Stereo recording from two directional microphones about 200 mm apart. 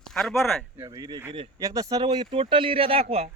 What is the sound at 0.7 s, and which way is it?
A man's voice, 20° right (ahead or behind).